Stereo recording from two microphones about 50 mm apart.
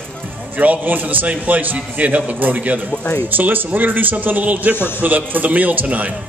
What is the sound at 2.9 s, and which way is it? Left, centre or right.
Speech, left.